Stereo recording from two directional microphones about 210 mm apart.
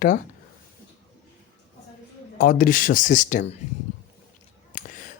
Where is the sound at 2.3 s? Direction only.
40° left (ahead or behind).